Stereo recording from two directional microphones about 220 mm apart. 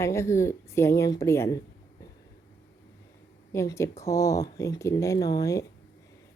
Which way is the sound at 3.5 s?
15° left (ahead or behind).